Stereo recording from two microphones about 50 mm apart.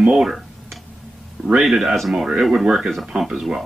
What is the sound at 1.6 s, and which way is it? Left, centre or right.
Speech, centre.